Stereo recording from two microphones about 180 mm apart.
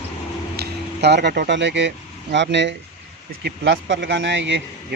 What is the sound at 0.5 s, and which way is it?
A man's voice, 70° right (ahead or behind).